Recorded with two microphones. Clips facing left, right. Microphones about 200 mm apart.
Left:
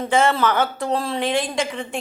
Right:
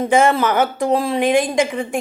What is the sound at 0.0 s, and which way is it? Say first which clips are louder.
A woman's voice: right 4 dB; 15° right (ahead or behind).